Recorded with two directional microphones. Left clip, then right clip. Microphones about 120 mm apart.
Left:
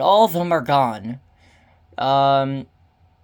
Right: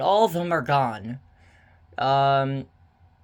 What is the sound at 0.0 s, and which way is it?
Speech, 45° left (ahead or behind).